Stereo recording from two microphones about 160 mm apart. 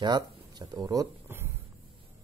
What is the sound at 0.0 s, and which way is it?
Speech, 25° right (ahead or behind).